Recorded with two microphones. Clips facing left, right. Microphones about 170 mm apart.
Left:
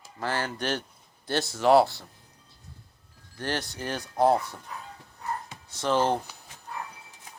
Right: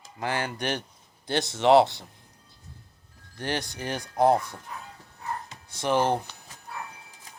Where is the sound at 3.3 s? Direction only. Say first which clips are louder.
Right 1 dB; 15° right (ahead or behind).